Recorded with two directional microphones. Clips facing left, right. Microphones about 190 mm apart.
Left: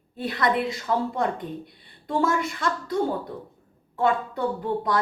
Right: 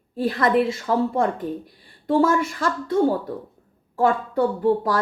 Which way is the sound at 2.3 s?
30° right (ahead or behind).